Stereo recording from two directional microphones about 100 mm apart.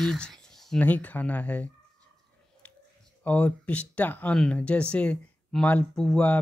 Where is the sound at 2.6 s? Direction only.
15° left (ahead or behind).